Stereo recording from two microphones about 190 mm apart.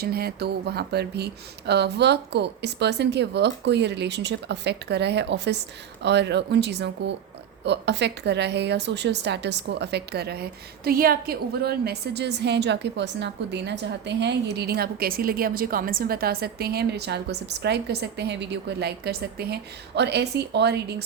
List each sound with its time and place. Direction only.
0.0 s a woman's voice: 55° right (ahead or behind)